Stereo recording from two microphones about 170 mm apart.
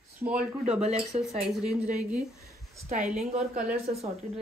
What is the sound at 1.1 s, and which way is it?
Speech, 35° right (ahead or behind).